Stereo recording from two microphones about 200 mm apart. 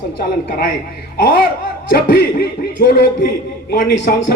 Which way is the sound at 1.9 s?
50° left (ahead or behind).